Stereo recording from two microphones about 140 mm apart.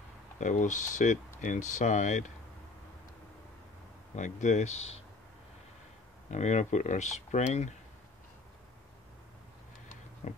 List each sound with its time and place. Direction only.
0.4 s speech: 60° left (ahead or behind)
4.1 s speech: 60° left (ahead or behind)
6.3 s speech: 55° left (ahead or behind)
10.2 s a sound: 55° left (ahead or behind)